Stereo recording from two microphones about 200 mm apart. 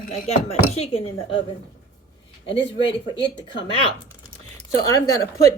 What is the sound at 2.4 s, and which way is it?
Speech, 25° left (ahead or behind).